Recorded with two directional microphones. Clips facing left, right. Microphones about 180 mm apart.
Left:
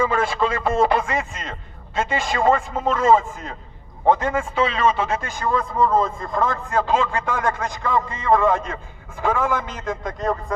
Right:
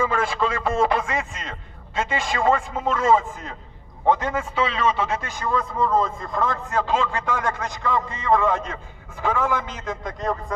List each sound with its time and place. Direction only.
0.0 s a man's voice: 30° left (ahead or behind)